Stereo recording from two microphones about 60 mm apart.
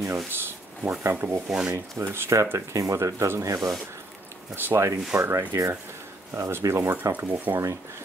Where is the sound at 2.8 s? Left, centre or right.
Right.